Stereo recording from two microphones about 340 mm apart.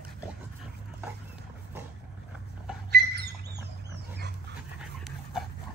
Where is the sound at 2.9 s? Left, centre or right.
Right.